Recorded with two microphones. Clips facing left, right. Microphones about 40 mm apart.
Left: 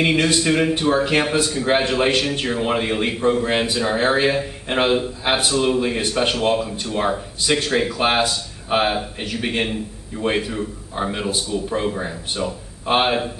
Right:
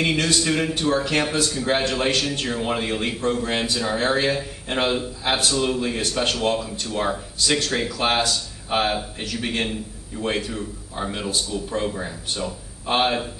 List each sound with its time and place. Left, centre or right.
0.0 s speech: centre